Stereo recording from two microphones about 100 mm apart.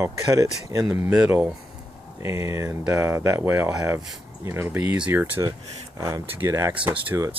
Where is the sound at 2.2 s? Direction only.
30° right (ahead or behind).